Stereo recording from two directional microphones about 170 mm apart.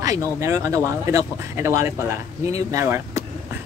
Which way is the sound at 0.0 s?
20° right (ahead or behind).